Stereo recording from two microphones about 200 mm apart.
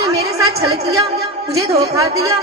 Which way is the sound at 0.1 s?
15° right (ahead or behind).